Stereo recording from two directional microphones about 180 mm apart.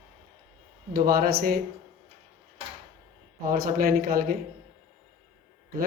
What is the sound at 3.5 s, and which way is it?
Speech, 55° right (ahead or behind).